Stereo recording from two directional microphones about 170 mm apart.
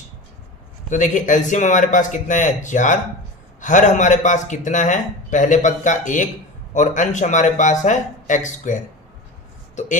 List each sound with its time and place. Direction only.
0.9 s speech: 50° left (ahead or behind)